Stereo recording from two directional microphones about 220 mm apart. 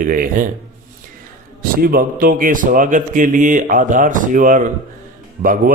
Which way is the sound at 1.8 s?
40° right (ahead or behind).